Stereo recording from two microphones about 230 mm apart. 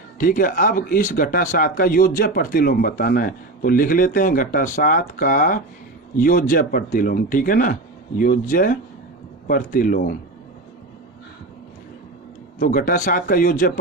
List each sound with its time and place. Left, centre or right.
0.2 s speech: left
12.5 s speech: left